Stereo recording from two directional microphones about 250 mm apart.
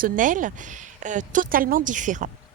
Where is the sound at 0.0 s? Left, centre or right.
Right.